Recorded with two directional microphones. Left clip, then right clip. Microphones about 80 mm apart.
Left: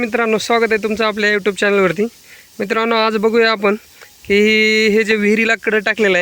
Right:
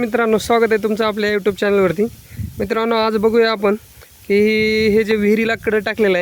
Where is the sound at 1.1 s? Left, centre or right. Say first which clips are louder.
Left 2 dB; centre.